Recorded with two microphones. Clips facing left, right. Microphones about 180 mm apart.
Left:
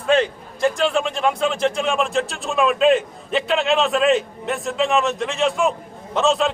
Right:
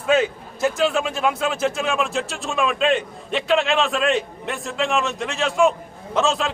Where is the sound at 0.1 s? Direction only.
5° right (ahead or behind).